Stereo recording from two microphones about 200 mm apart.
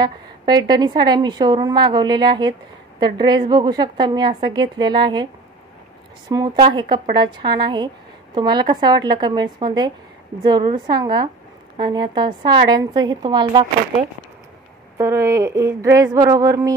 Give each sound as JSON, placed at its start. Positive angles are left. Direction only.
{"t": 0.0, "sound": "a woman's voice", "side_deg": -20}
{"t": 15.0, "sound": "speech", "side_deg": -15}